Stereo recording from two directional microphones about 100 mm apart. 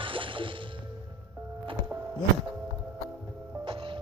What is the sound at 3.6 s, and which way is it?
Music, 60° right (ahead or behind).